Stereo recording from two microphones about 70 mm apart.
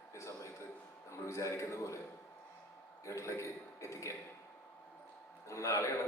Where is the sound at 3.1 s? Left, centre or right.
Left.